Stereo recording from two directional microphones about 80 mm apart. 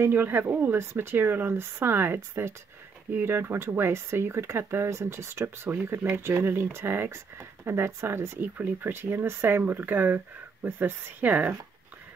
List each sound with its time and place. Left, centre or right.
0.0 s speech: right